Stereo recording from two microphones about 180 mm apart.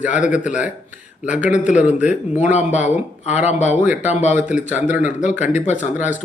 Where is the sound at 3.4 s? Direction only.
40° left (ahead or behind).